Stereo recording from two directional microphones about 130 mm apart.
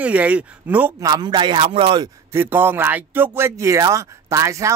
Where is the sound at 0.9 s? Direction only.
30° right (ahead or behind).